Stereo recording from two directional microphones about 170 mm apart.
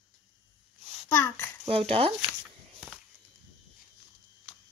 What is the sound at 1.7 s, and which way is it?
Speech, 35° right (ahead or behind).